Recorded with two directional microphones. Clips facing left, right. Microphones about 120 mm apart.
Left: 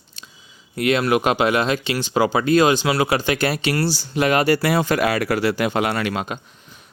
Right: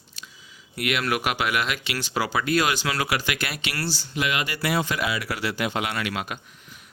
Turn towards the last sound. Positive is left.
turn(degrees=30)  # may be behind; listen again after turning